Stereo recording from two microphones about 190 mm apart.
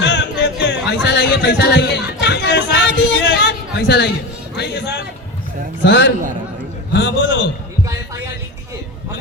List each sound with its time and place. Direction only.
0.0 s a sound: 65° left (ahead or behind)
1.0 s music: 60° left (ahead or behind)
5.8 s a man's voice: 65° left (ahead or behind)
6.9 s a man's voice: 75° left (ahead or behind)